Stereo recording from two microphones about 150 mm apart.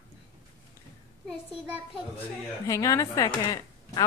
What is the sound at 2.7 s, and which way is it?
Speech, 20° left (ahead or behind).